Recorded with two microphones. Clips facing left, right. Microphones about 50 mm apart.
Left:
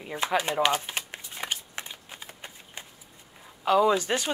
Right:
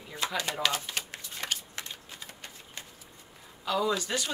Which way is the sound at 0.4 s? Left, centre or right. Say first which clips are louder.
Left 5 dB; left.